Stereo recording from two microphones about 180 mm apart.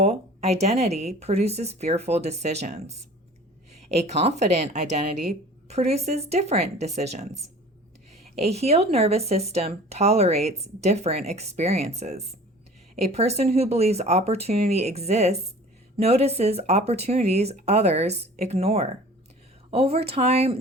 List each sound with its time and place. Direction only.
0.0 s speech: 35° right (ahead or behind)